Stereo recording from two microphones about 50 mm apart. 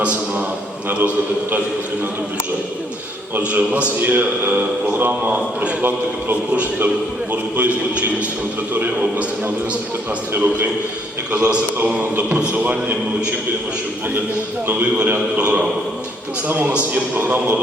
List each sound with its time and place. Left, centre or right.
0.0 s a sound: right
0.9 s a man's voice: right
3.5 s a man's voice: right
9.0 s a man's voice: right
10.3 s a man's voice: right
11.3 s a man's voice: right
14.7 s a man's voice: right
16.5 s a man's voice: right